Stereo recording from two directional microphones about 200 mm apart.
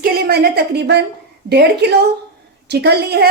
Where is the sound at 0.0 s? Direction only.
50° right (ahead or behind).